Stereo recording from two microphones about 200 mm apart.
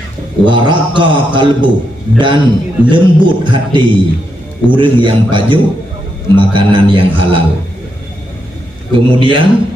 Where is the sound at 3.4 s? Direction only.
25° right (ahead or behind).